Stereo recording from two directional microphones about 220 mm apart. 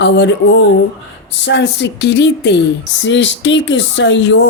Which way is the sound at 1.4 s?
55° left (ahead or behind).